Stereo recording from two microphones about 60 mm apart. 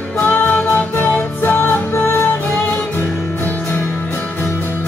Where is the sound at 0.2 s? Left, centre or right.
Left.